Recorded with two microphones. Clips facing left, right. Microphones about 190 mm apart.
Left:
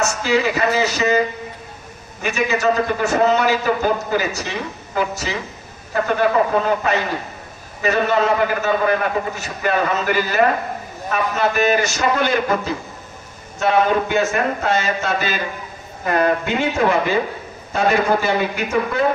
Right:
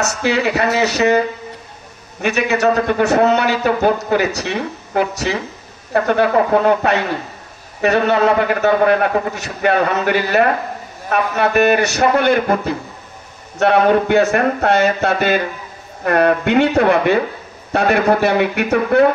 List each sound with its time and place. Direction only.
0.0 s a man's voice: 65° right (ahead or behind)
2.2 s a man's voice: 65° right (ahead or behind)